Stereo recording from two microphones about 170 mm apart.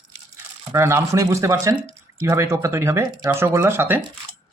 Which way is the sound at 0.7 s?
15° right (ahead or behind).